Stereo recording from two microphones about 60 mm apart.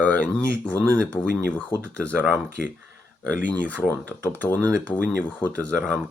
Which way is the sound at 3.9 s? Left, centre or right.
Left.